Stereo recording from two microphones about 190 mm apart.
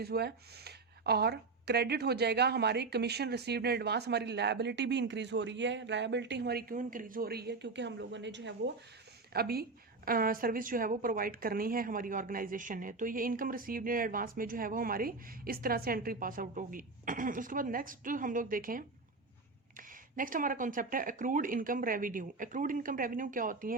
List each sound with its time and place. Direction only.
0.0 s speech: 60° right (ahead or behind)
9.3 s a woman's voice: 55° right (ahead or behind)